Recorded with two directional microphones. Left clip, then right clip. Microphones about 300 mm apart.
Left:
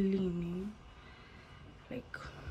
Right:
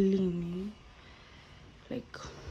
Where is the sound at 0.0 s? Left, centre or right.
Centre.